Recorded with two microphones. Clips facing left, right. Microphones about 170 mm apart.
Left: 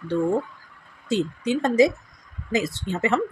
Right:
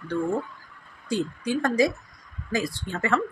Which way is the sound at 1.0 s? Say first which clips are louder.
Left 3 dB; 20° left (ahead or behind).